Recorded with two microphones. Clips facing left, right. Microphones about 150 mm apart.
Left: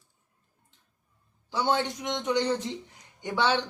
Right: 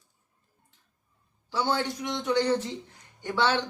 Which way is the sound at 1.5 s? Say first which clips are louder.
Left 1 dB; 20° left (ahead or behind).